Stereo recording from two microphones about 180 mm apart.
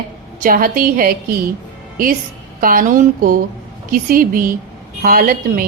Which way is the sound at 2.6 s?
50° right (ahead or behind).